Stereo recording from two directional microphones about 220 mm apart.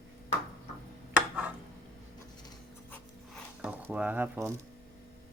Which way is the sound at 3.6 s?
5° right (ahead or behind).